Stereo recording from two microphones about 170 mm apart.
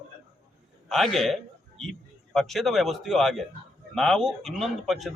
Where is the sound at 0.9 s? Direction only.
Centre (ahead or behind).